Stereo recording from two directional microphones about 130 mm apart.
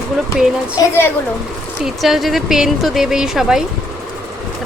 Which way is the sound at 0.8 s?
30° left (ahead or behind).